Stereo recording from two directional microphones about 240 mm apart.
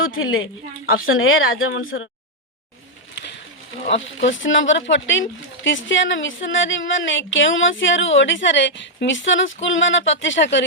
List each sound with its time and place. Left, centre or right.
0.2 s speech: left
3.8 s speech: left